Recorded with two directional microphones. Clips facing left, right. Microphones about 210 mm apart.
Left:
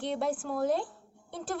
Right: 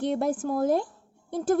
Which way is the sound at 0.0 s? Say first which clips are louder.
Right 5 dB; 45° right (ahead or behind).